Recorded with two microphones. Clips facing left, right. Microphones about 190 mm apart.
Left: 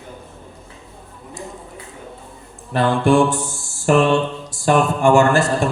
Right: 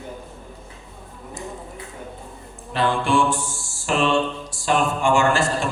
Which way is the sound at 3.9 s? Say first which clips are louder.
Left 5 dB; 50° left (ahead or behind).